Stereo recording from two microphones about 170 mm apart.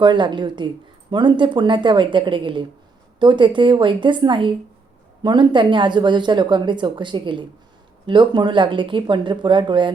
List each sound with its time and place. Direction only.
0.0 s speech: 25° right (ahead or behind)